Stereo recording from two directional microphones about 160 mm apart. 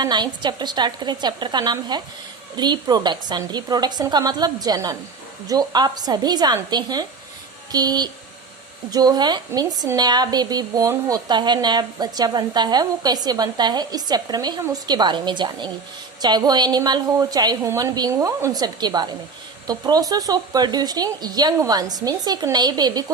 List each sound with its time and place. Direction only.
0.0 s a woman's voice: 25° right (ahead or behind)